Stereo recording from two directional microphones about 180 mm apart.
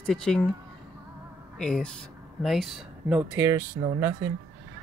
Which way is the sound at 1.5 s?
5° left (ahead or behind).